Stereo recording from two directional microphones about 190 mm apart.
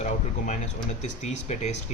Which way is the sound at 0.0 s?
40° left (ahead or behind).